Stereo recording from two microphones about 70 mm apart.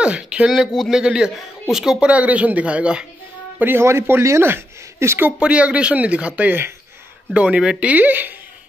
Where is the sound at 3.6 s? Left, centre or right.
Right.